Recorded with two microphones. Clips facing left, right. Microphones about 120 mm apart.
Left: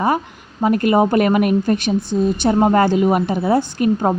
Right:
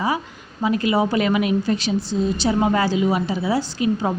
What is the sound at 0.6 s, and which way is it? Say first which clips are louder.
Speech: left 5 dB; 50° left (ahead or behind).